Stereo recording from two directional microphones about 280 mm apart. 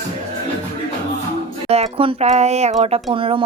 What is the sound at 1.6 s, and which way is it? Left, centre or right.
Speech, right.